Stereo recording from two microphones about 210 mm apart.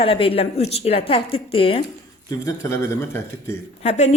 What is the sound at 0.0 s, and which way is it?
A woman's voice, 25° left (ahead or behind).